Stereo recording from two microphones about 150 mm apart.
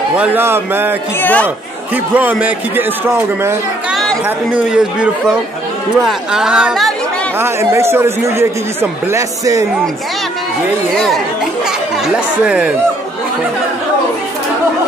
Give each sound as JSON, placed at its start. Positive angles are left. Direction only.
{"t": 0.1, "sound": "speech", "side_deg": -10}
{"t": 1.2, "sound": "speech", "side_deg": 10}
{"t": 2.1, "sound": "speech", "side_deg": -10}
{"t": 3.9, "sound": "chatter", "side_deg": 0}
{"t": 4.5, "sound": "speech", "side_deg": -10}
{"t": 7.3, "sound": "a man's voice", "side_deg": -15}
{"t": 12.4, "sound": "speech", "side_deg": -5}